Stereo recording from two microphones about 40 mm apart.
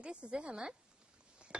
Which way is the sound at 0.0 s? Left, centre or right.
Right.